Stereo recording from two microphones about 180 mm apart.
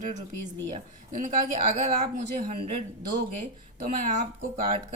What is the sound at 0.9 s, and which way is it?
Speech, 45° right (ahead or behind).